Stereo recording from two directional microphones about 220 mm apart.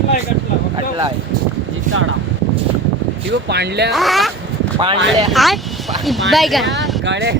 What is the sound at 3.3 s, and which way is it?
Speech, 50° right (ahead or behind).